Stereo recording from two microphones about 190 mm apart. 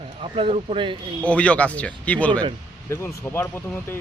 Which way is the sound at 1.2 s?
5° left (ahead or behind).